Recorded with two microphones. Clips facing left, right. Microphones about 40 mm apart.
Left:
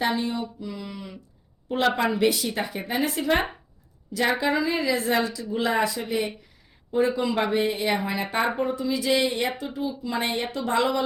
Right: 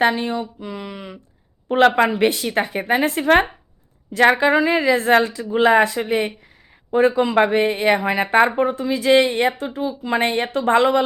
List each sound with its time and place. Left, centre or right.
0.0 s a woman's voice: right